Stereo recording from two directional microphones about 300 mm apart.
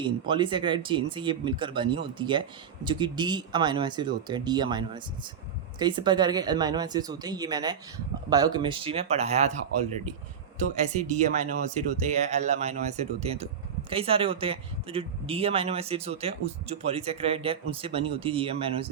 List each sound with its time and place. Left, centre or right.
0.0 s speech: centre
10.8 s speech: right